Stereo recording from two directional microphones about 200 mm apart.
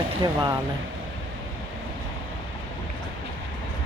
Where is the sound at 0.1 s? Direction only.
25° right (ahead or behind).